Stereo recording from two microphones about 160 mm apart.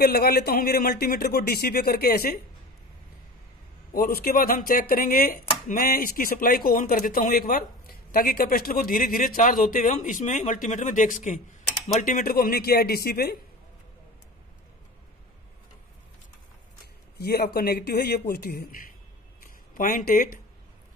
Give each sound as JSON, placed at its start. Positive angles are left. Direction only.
{"t": 0.0, "sound": "speech", "side_deg": 75}
{"t": 3.9, "sound": "speech", "side_deg": 70}
{"t": 17.2, "sound": "speech", "side_deg": 80}